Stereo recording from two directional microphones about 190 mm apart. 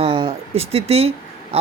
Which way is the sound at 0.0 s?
30° right (ahead or behind).